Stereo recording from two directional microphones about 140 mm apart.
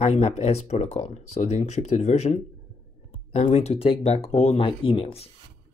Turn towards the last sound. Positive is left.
turn(degrees=45)  # may be behind; listen again after turning